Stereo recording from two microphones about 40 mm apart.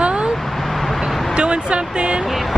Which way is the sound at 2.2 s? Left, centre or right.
Centre.